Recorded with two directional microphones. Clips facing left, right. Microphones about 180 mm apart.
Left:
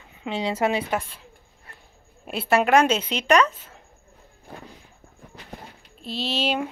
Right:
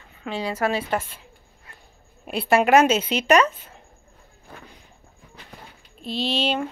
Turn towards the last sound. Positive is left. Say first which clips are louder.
# right 1 dB
turn(degrees=5)  # may be behind; listen again after turning